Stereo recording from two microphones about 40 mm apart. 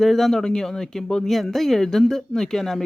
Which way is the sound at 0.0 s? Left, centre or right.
Centre.